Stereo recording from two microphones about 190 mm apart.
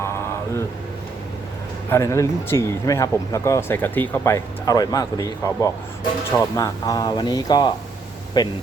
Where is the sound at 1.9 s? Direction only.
15° left (ahead or behind).